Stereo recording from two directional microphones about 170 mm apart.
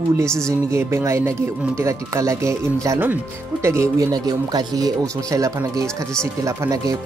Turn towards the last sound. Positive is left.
turn(degrees=-20)  # may be behind; listen again after turning